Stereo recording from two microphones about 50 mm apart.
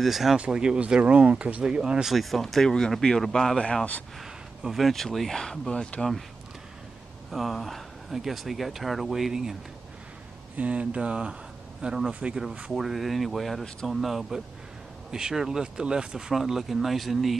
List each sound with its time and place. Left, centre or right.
0.0 s speech: centre
0.4 s speech: centre
2.0 s speech: centre
4.2 s speech: centre
5.7 s speech: centre
7.2 s speech: centre
10.5 s speech: right
12.7 s speech: centre